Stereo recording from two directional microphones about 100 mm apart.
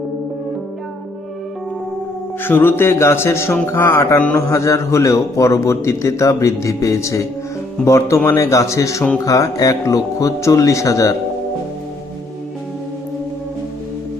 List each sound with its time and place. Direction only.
2.4 s speech: 20° left (ahead or behind)
4.4 s a man's voice: 30° left (ahead or behind)